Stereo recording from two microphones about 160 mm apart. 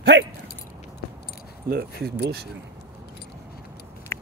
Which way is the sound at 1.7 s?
85° right.